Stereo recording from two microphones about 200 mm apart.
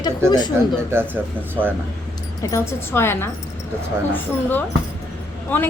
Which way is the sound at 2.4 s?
15° left (ahead or behind).